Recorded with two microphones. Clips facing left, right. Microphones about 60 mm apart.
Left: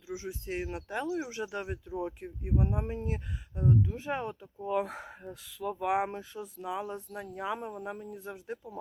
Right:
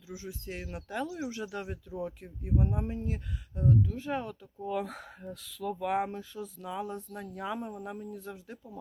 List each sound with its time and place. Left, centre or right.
0.1 s speech: centre
2.6 s speech: centre
6.1 s speech: left